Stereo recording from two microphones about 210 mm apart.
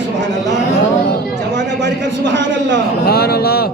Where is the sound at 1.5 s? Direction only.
60° right (ahead or behind).